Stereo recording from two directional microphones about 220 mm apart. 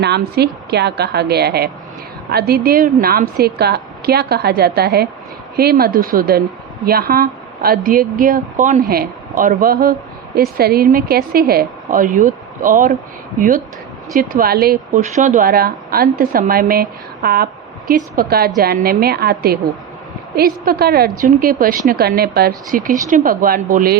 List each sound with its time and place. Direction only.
0.0 s a woman's voice: 50° right (ahead or behind)
14.1 s a woman's voice: 40° right (ahead or behind)